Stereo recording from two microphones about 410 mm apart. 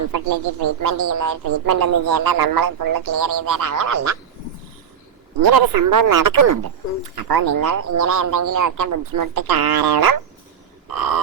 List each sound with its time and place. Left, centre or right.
0.1 s speech: right
5.4 s speech: right
7.3 s speech: right
10.8 s a sound: right